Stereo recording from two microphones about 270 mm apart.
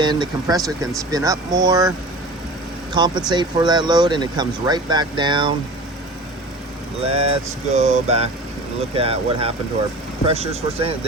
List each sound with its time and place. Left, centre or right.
0.0 s speech: centre
2.9 s speech: centre
7.1 s a sound: right